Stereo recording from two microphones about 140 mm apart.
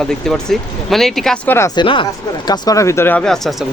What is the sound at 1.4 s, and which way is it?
Speech, 20° left (ahead or behind).